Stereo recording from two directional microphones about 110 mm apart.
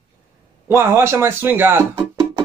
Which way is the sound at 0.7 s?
20° right (ahead or behind).